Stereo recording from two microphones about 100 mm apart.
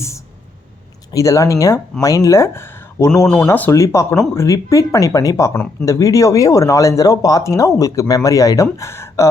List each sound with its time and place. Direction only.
1.1 s speech: 30° left (ahead or behind)